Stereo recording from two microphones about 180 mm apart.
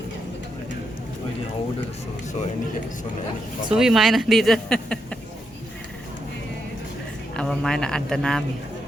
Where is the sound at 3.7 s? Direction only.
Centre (ahead or behind).